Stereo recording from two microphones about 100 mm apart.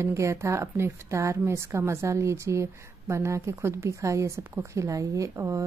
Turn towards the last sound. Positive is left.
turn(degrees=-30)  # may be behind; listen again after turning